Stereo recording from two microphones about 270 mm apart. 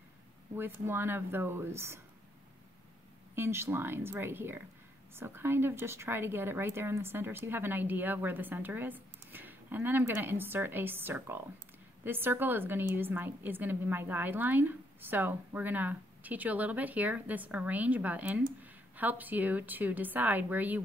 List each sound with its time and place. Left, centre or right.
0.6 s a woman's voice: centre
3.3 s a woman's voice: centre